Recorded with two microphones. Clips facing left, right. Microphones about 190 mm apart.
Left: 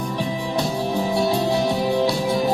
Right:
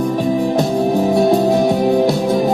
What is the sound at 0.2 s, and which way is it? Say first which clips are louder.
Music: right 6 dB; 45° right (ahead or behind).